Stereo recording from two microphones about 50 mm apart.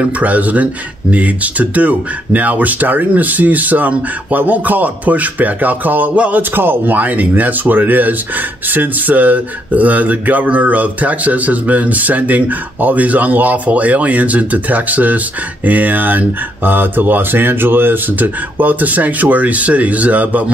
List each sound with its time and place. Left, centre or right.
0.0 s speech: right
6.5 s speech: right